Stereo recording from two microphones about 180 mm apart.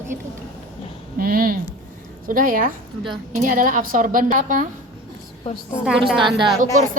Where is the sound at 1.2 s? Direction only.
55° right (ahead or behind).